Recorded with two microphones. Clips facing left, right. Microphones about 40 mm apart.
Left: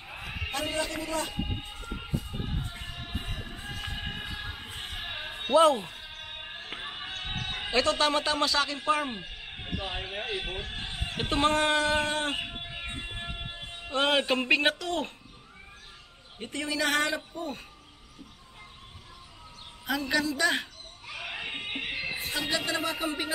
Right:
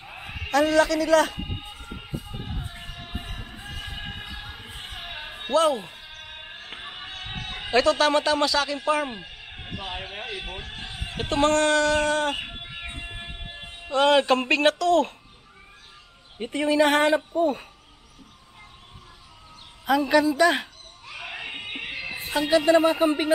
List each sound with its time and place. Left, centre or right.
0.5 s a man's voice: right
1.9 s music: centre
3.8 s a sound: centre
5.7 s music: centre
10.2 s a man's voice: centre
12.4 s a sound: centre
13.5 s music: centre
13.9 s speech: centre
16.3 s speech: centre
19.9 s a woman's voice: centre
21.1 s a sound: centre
22.3 s a woman's voice: centre